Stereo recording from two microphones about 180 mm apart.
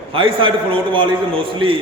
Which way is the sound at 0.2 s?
30° right (ahead or behind).